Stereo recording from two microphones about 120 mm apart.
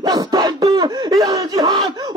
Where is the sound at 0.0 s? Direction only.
30° right (ahead or behind).